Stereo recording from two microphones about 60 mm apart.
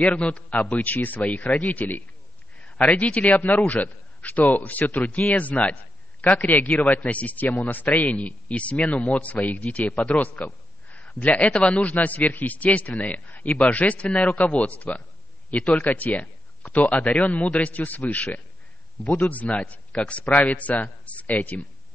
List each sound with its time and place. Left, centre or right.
0.0 s speech: left